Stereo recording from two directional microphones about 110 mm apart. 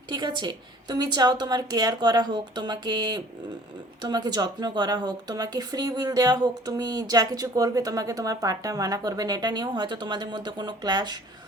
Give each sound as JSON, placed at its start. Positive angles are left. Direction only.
{"t": 0.1, "sound": "speech", "side_deg": -40}